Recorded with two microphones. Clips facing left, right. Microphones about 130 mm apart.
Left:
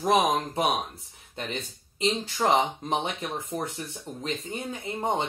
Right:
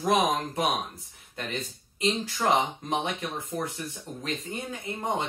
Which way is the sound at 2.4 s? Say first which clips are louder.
Left 2 dB; 25° left (ahead or behind).